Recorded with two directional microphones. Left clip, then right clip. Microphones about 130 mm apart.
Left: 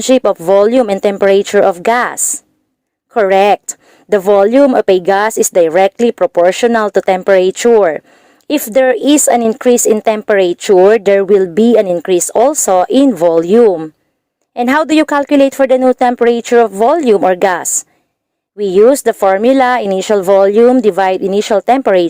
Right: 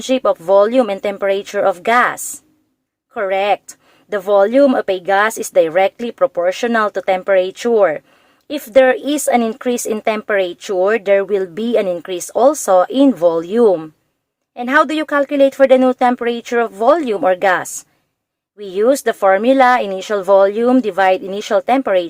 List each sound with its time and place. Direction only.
0.0 s speech: 65° left (ahead or behind)